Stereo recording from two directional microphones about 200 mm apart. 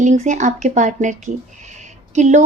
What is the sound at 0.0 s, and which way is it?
Speech, 40° right (ahead or behind).